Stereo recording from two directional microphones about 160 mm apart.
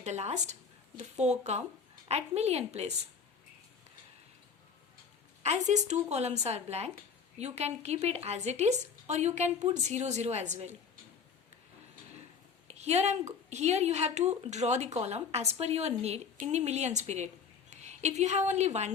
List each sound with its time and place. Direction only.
0.0 s a woman's voice: 45° right (ahead or behind)
5.4 s a woman's voice: 45° right (ahead or behind)
12.6 s a woman's voice: 40° right (ahead or behind)